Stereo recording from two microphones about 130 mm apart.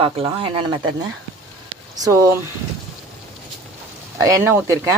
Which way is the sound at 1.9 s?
30° right (ahead or behind).